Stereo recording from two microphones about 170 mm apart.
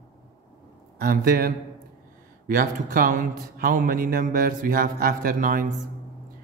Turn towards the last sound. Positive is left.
turn(degrees=-55)  # may be behind; listen again after turning